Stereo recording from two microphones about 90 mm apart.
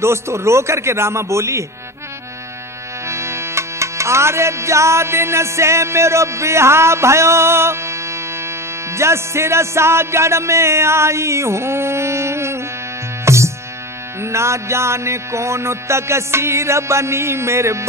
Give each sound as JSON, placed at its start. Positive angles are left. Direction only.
{"t": 0.0, "sound": "music", "side_deg": -30}
{"t": 3.1, "sound": "music", "side_deg": -30}